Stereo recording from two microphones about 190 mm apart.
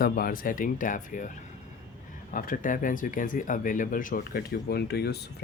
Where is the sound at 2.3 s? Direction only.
50° left (ahead or behind).